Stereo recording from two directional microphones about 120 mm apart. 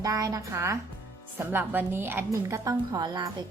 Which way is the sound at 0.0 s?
30° right (ahead or behind).